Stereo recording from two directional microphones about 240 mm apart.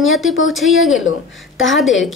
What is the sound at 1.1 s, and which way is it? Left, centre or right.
Speech, left.